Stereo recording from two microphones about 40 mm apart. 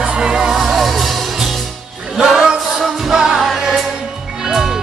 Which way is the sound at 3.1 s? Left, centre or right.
Centre.